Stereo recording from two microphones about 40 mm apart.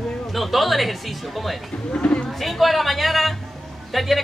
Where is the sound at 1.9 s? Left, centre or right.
Left.